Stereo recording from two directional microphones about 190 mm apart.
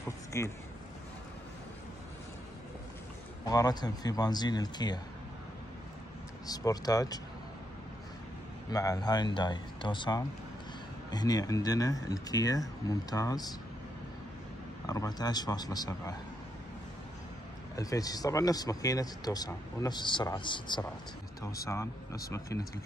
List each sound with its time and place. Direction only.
0.3 s speech: 15° left (ahead or behind)
3.4 s speech: 20° left (ahead or behind)
6.4 s speech: 20° left (ahead or behind)
8.6 s speech: 20° left (ahead or behind)
14.9 s speech: 20° left (ahead or behind)
17.7 s speech: 20° left (ahead or behind)